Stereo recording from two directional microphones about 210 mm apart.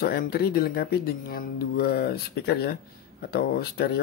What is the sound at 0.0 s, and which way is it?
Speech, 45° left (ahead or behind).